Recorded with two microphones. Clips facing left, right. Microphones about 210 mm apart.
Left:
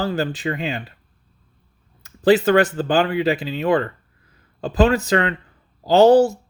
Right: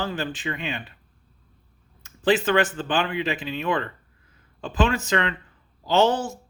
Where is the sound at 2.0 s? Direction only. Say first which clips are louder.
Left 6 dB; 40° left (ahead or behind).